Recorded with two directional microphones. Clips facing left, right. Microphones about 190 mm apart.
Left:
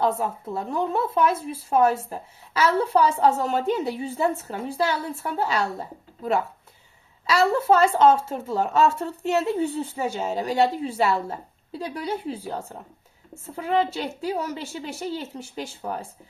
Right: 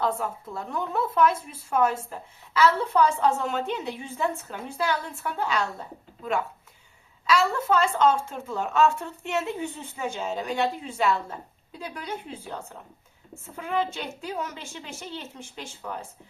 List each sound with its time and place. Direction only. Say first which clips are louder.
0.0 s a woman's voice: left 4 dB; 25° left (ahead or behind)
7.3 s speech: left 4 dB; 40° left (ahead or behind)